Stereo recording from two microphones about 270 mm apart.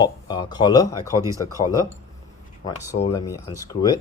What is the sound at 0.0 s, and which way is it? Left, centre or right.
Speech, centre.